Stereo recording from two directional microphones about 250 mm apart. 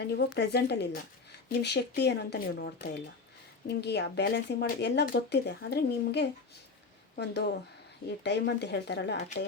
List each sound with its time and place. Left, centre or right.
0.0 s speech: left